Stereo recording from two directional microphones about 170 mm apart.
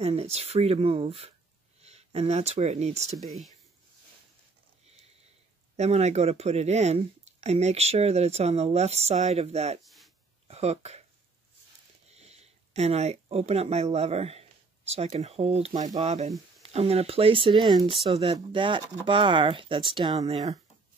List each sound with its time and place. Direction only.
0.0 s speech: 40° right (ahead or behind)
3.2 s speech: centre (ahead or behind)
5.8 s speech: 40° right (ahead or behind)
9.8 s a sound: centre (ahead or behind)
10.5 s speech: 40° right (ahead or behind)
12.1 s speech: 40° right (ahead or behind)